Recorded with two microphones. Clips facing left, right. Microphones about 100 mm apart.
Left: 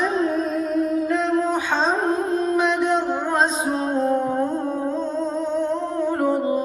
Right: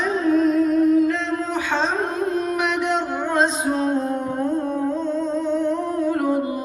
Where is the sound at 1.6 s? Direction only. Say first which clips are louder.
Left 1 dB; 20° left (ahead or behind).